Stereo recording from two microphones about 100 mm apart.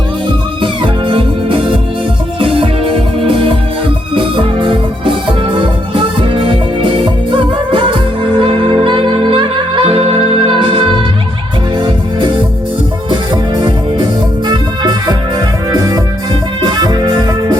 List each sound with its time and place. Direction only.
0.6 s music: 55° right (ahead or behind)
13.1 s music: 50° right (ahead or behind)